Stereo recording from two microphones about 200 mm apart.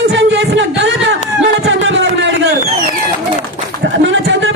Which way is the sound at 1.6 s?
65° right (ahead or behind).